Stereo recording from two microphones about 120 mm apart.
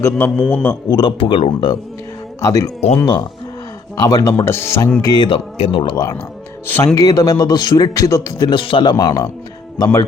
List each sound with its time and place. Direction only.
0.0 s a man's voice: 20° left (ahead or behind)
0.9 s speech: 40° left (ahead or behind)
2.4 s speech: 30° left (ahead or behind)
3.9 s speech: 30° left (ahead or behind)
5.0 s a man's voice: 35° left (ahead or behind)
5.5 s speech: 60° left (ahead or behind)
5.8 s a man's voice: 35° left (ahead or behind)
6.7 s speech: 20° left (ahead or behind)
6.9 s a man's voice: 30° left (ahead or behind)